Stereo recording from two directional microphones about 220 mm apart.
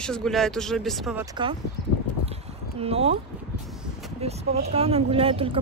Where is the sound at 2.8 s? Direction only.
25° right (ahead or behind).